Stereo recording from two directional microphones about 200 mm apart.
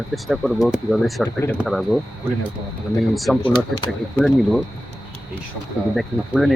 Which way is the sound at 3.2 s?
Centre (ahead or behind).